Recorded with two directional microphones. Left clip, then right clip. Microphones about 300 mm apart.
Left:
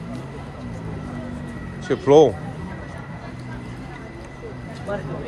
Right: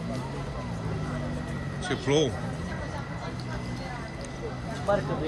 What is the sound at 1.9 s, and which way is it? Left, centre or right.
Speech, centre.